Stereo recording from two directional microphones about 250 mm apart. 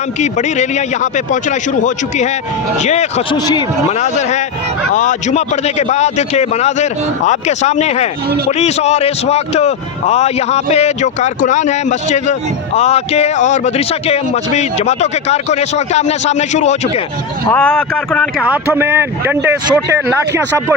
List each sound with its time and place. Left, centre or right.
0.2 s a man's voice: left
3.9 s a man's voice: left
17.4 s speech: centre
18.4 s speech: centre